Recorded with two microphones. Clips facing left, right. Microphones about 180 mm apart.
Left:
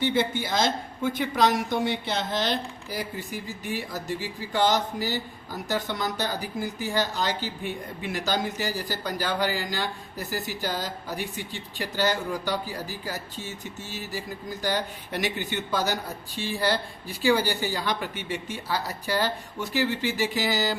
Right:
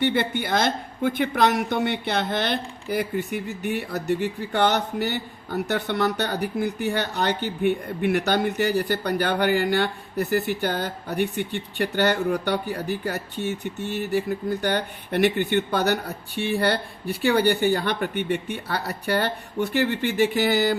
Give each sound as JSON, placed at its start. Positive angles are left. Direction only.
{"t": 0.0, "sound": "speech", "side_deg": -60}